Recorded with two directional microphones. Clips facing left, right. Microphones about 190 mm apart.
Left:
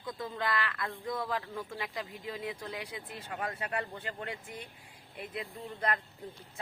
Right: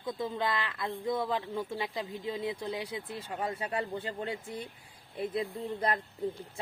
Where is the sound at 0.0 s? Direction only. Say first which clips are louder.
Right 4 dB; 20° right (ahead or behind).